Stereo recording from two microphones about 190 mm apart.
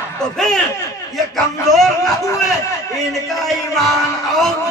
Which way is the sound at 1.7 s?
Centre (ahead or behind).